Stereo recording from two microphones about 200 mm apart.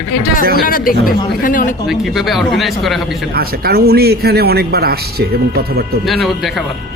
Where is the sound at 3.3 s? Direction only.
50° right (ahead or behind).